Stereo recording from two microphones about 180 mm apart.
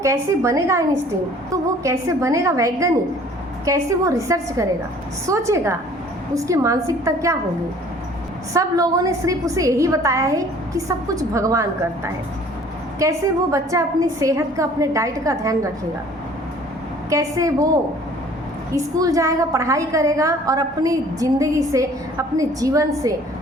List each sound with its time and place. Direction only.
0.0 s a woman's voice: 15° right (ahead or behind)
8.5 s a woman's voice: 20° right (ahead or behind)
13.0 s a woman's voice: 15° right (ahead or behind)
17.1 s a woman's voice: 20° right (ahead or behind)
18.7 s a woman's voice: 20° right (ahead or behind)